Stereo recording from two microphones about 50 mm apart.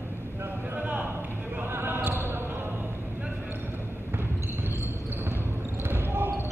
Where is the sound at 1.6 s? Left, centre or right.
Right.